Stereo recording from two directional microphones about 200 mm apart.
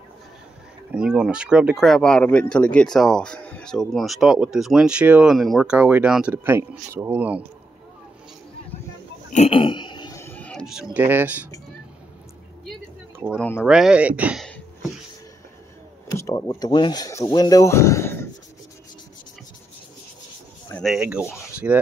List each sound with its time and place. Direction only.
0.9 s speech: 5° right (ahead or behind)
9.3 s a sound: 30° left (ahead or behind); by 11.4 s 10° right (ahead or behind)
12.6 s a sound: centre (ahead or behind)
13.6 s speech: 5° right (ahead or behind)
16.1 s speech: 15° left (ahead or behind)
20.8 s speech: 5° right (ahead or behind)